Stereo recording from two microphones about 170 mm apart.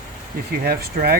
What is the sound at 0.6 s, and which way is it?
Speech, 65° right (ahead or behind).